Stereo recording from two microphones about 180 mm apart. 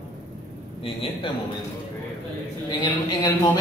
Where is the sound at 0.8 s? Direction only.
30° left (ahead or behind).